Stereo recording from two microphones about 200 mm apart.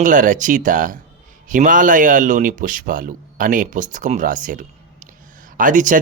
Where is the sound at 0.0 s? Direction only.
40° right (ahead or behind).